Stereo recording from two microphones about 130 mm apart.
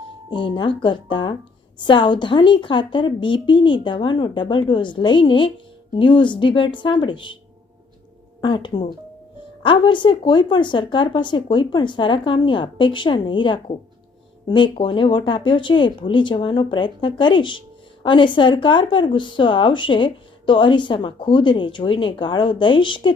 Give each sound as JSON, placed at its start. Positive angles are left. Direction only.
{"t": 0.3, "sound": "speech", "side_deg": 35}
{"t": 8.4, "sound": "speech", "side_deg": 40}